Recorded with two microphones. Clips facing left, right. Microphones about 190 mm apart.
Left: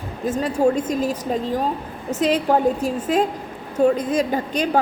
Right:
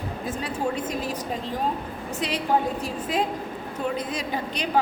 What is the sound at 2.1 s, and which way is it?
A woman's voice, 45° left (ahead or behind).